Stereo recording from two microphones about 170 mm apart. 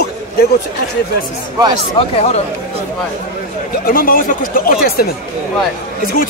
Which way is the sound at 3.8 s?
55° left (ahead or behind).